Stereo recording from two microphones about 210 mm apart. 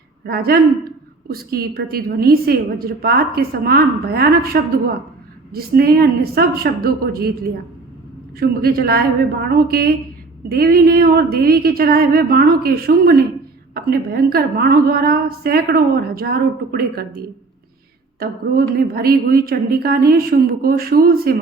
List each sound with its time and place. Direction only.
0.3 s a woman's voice: 45° right (ahead or behind)
8.4 s a woman's voice: 45° right (ahead or behind)
18.2 s a woman's voice: 45° right (ahead or behind)